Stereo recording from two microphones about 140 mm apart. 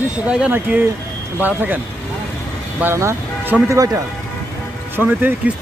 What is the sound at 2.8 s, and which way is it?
Speech, 20° right (ahead or behind).